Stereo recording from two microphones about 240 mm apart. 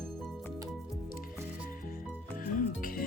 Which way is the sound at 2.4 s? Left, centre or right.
Left.